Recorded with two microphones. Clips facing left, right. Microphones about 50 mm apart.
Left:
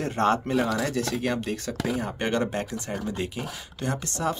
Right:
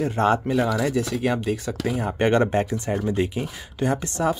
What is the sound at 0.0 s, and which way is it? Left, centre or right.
Speech, centre.